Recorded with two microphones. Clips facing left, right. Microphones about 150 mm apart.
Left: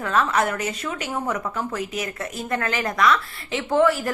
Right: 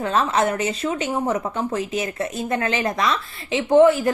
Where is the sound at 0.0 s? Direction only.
25° right (ahead or behind).